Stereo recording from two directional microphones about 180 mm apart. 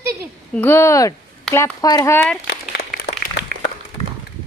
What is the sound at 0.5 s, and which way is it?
Speech, 10° left (ahead or behind).